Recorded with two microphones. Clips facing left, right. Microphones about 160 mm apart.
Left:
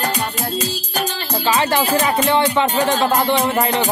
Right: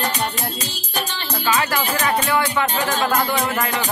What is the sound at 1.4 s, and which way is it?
Speech, 30° left (ahead or behind).